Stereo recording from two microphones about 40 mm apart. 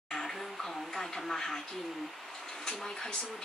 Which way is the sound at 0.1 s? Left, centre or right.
Centre.